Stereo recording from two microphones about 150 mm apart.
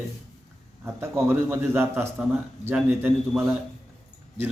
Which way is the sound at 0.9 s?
15° right (ahead or behind).